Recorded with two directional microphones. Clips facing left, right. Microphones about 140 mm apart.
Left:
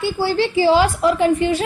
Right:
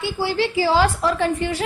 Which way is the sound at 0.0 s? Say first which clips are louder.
Left 3 dB; 35° left (ahead or behind).